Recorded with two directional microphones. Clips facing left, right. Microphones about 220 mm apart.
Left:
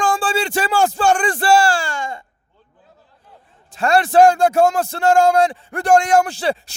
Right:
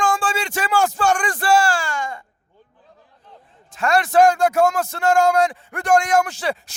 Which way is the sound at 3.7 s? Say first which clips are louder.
Left 3 dB; 30° left (ahead or behind).